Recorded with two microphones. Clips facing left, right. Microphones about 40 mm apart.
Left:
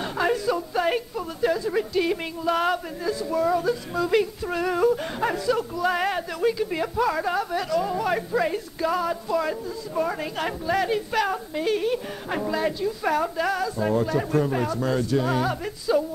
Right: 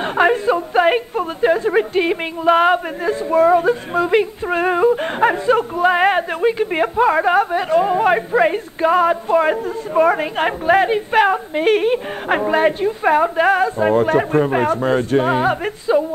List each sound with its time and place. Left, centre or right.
0.0 s a woman's voice: right